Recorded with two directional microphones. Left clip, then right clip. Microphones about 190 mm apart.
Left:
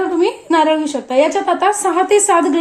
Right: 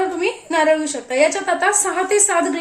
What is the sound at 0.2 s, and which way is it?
A woman's voice, 30° left (ahead or behind).